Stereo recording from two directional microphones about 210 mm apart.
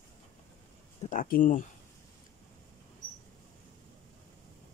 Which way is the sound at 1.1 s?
40° left (ahead or behind).